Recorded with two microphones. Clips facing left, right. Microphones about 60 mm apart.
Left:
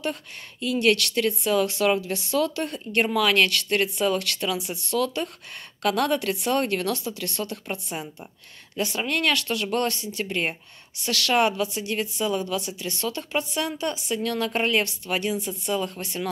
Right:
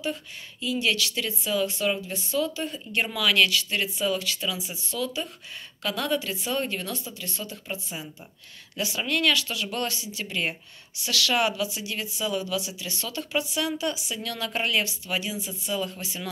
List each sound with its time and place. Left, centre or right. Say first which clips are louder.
0.0 s a woman's voice: left 1 dB; left
2.0 s a woman's voice: left 4 dB; left
3.0 s a woman's voice: left 3 dB; left
7.7 s a woman's voice: left 3 dB; left
8.7 s speech: left 2 dB; left
14.9 s speech: left 4 dB; left